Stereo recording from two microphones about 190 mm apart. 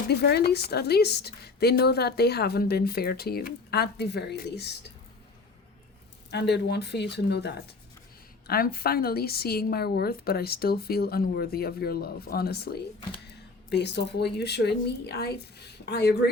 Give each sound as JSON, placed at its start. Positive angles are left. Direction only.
{"t": 0.1, "sound": "a woman's voice", "side_deg": 60}
{"t": 6.3, "sound": "a woman's voice", "side_deg": 60}